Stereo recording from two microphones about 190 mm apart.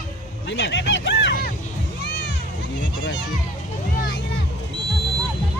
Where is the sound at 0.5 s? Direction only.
70° left (ahead or behind).